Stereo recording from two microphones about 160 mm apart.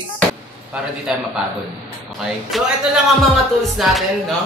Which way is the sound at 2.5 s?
Centre (ahead or behind).